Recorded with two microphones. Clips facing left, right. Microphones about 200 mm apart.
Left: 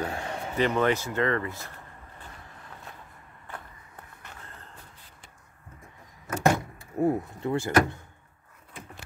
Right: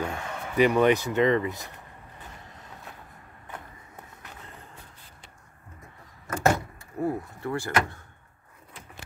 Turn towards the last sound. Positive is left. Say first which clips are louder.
# left 3 dB
turn(degrees=20)  # may be behind; listen again after turning